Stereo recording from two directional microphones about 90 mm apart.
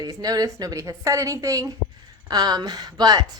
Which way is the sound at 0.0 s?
45° right (ahead or behind).